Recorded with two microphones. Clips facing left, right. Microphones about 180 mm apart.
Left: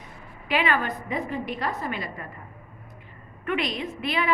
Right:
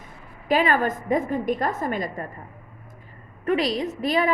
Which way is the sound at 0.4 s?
40° right (ahead or behind).